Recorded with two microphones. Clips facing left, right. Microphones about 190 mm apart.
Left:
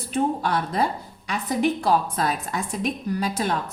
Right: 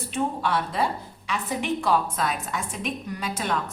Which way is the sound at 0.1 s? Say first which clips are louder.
Left 3 dB; 40° left (ahead or behind).